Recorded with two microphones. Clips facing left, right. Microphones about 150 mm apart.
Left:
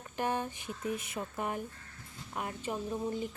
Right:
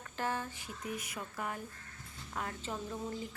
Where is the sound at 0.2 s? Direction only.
20° left (ahead or behind).